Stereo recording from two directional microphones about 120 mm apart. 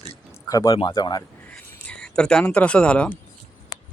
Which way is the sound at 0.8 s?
45° left (ahead or behind).